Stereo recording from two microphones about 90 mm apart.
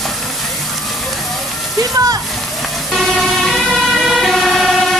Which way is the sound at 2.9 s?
Centre (ahead or behind).